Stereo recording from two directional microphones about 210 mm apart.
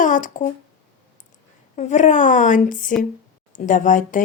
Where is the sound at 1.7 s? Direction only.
35° left (ahead or behind).